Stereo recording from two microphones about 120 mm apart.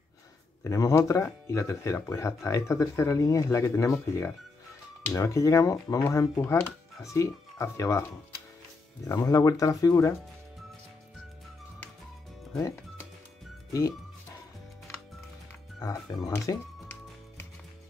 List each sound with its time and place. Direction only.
0.7 s speech: 25° left (ahead or behind)
9.3 s speech: 30° left (ahead or behind)
15.8 s speech: 25° left (ahead or behind)